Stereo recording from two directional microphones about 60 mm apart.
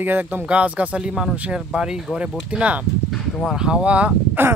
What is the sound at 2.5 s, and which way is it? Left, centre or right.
Speech, right.